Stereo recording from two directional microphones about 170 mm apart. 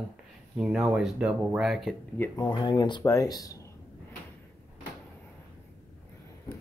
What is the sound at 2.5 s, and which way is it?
Speech, 30° left (ahead or behind).